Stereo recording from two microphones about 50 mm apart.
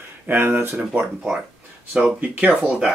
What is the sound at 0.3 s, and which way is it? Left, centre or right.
Speech, right.